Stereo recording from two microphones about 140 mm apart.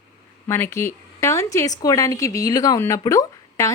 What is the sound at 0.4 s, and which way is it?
Speech, 20° left (ahead or behind).